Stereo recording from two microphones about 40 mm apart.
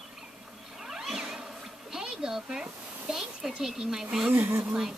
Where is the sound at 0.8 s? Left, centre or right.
Centre.